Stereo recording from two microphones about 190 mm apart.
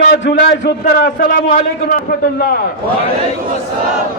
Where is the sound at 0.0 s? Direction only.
60° left (ahead or behind).